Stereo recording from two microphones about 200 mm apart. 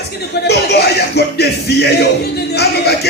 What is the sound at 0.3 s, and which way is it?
Speech, 55° left (ahead or behind).